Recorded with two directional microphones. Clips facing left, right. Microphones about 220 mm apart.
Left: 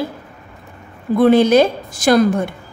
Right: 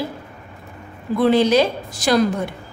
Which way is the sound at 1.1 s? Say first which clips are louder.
Left 4 dB; 50° left (ahead or behind).